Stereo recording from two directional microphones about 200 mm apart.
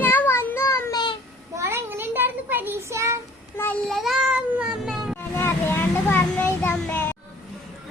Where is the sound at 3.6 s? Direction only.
5° left (ahead or behind).